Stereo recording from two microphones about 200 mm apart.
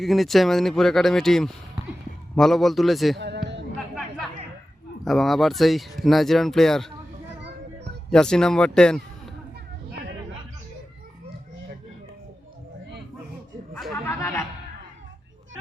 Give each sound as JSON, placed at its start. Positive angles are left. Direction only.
{"t": 0.0, "sound": "speech", "side_deg": 0}
{"t": 3.2, "sound": "a sound", "side_deg": -60}
{"t": 5.0, "sound": "speech", "side_deg": 0}
{"t": 8.1, "sound": "speech", "side_deg": 5}
{"t": 13.7, "sound": "chatter", "side_deg": 0}
{"t": 14.1, "sound": "music", "side_deg": 10}